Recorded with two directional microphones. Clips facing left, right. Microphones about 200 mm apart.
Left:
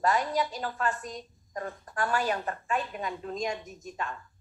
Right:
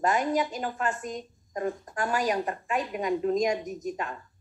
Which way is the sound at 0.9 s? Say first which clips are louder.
Right 3 dB; 45° right (ahead or behind).